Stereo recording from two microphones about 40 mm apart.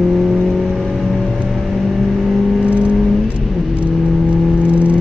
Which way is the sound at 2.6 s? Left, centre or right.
Right.